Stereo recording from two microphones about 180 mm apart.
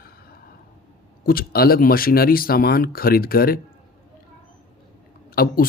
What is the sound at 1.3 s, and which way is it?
Speech, 55° left (ahead or behind).